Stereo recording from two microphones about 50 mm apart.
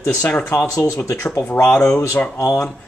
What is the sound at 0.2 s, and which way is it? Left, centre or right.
Speech, left.